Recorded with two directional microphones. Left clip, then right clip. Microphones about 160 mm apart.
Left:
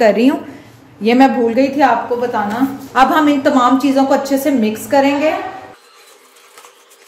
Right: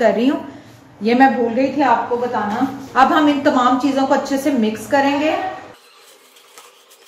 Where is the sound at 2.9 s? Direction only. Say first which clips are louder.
Left 2 dB; 35° left (ahead or behind).